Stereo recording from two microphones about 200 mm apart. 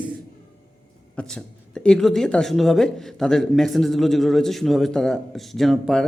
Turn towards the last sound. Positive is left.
turn(degrees=0)  # may be behind; listen again after turning